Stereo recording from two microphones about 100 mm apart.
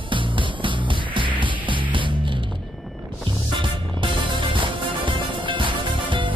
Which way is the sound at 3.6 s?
55° right (ahead or behind).